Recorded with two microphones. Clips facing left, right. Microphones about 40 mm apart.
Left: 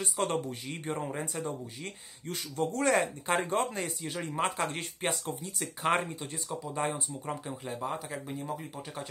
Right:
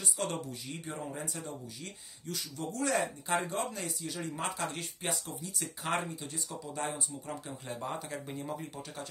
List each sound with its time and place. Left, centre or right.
0.0 s speech: left
7.6 s speech: centre